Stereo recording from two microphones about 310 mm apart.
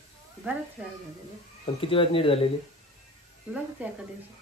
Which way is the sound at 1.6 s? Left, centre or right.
Centre.